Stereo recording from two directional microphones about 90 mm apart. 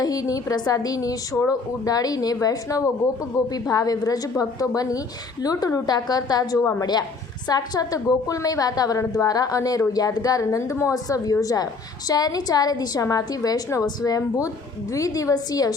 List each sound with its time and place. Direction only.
0.0 s a woman's voice: 45° left (ahead or behind)
10.4 s a woman's voice: 35° left (ahead or behind)